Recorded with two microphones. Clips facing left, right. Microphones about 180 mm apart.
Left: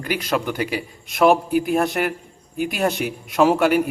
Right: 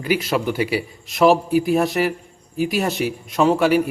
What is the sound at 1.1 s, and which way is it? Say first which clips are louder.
Speech: right 1 dB; centre (ahead or behind).